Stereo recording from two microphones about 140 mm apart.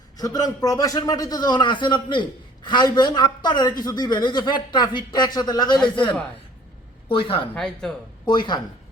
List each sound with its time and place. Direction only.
0.2 s a man's voice: 25° left (ahead or behind)
7.5 s speech: 5° left (ahead or behind)
8.3 s speech: 30° left (ahead or behind)